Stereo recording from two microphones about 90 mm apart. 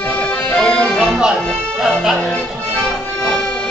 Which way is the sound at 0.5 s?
10° left (ahead or behind).